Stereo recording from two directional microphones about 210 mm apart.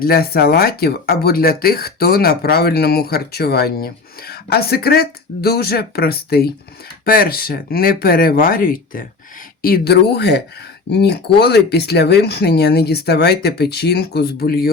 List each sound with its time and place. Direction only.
0.0 s speech: 45° left (ahead or behind)